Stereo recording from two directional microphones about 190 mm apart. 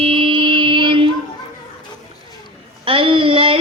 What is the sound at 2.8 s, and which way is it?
Child singing, 30° right (ahead or behind).